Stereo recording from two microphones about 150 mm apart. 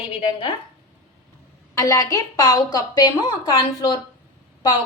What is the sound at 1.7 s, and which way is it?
A woman's voice, 20° left (ahead or behind).